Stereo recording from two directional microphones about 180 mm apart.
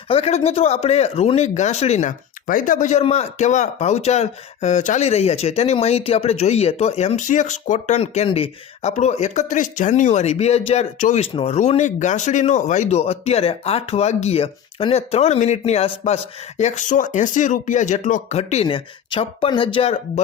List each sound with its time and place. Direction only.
0.1 s speech: 35° left (ahead or behind)